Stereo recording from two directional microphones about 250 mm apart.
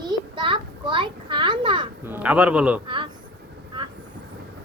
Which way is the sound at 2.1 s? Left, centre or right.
Centre.